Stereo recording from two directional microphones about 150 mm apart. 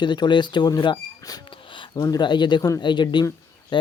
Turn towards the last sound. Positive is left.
turn(degrees=30)  # may be behind; listen again after turning